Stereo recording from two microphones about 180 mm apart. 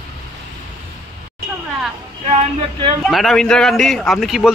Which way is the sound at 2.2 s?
35° right (ahead or behind).